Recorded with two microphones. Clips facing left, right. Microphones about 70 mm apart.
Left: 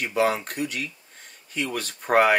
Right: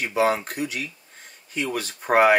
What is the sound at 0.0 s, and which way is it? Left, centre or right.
Speech, centre.